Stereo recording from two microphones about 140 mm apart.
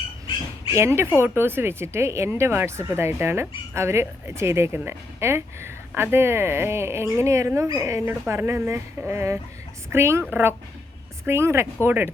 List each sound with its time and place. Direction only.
0.8 s speech: 20° right (ahead or behind)